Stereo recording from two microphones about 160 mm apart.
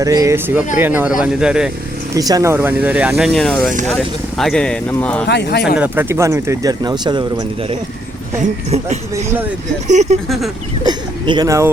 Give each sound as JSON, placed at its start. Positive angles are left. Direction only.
{"t": 0.0, "sound": "speech", "side_deg": -20}
{"t": 2.1, "sound": "speech", "side_deg": -20}
{"t": 5.3, "sound": "speech", "side_deg": 90}
{"t": 5.7, "sound": "speech", "side_deg": -10}
{"t": 9.8, "sound": "speech", "side_deg": -45}
{"t": 10.2, "sound": "speech", "side_deg": 0}
{"t": 10.8, "sound": "a sound", "side_deg": -25}